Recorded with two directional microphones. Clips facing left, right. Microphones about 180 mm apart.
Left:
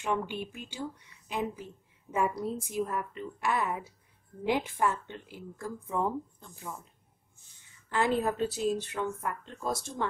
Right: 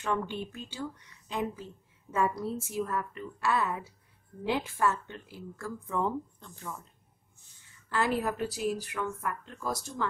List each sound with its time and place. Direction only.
0.0 s a woman's voice: 15° left (ahead or behind)
7.9 s speech: 20° left (ahead or behind)